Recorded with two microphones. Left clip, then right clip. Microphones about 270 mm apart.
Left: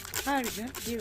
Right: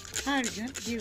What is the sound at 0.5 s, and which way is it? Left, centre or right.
Speech, left.